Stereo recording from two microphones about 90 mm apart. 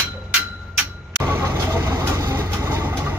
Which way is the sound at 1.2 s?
25° right (ahead or behind).